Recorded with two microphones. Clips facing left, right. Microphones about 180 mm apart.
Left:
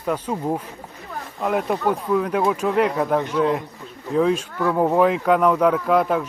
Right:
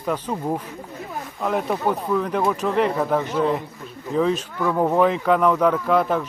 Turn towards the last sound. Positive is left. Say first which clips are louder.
# left 1 dB
turn(degrees=5)  # may be behind; listen again after turning